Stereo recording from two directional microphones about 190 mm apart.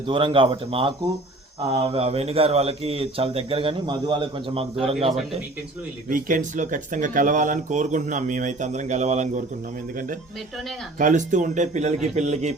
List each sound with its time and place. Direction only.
0.1 s speech: 25° right (ahead or behind)
6.1 s speech: 45° right (ahead or behind)